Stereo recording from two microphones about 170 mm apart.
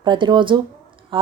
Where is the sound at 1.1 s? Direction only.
30° right (ahead or behind).